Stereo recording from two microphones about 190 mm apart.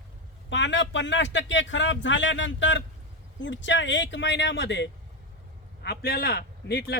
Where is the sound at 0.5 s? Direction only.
70° left (ahead or behind).